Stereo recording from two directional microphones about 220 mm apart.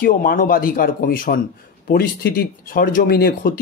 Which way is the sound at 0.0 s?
40° left (ahead or behind).